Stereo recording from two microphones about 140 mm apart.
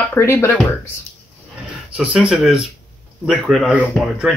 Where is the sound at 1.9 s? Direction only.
10° right (ahead or behind).